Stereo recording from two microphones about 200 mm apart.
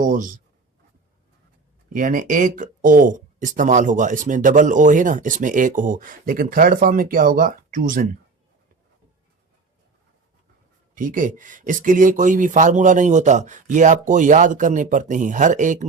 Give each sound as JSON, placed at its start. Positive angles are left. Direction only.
{"t": 0.0, "sound": "speech", "side_deg": -40}
{"t": 1.9, "sound": "speech", "side_deg": -40}
{"t": 10.9, "sound": "speech", "side_deg": -40}